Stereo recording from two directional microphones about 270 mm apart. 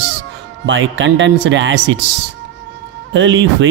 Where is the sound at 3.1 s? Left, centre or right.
Right.